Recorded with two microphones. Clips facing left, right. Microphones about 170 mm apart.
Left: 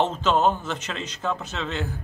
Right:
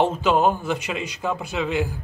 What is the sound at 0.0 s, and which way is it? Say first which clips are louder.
Speech: right 2 dB; 10° right (ahead or behind).